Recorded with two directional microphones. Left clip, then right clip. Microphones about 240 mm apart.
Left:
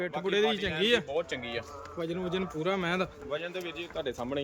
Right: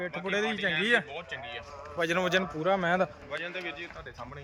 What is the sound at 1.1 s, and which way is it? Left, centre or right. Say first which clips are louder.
Speech: left 6 dB; left.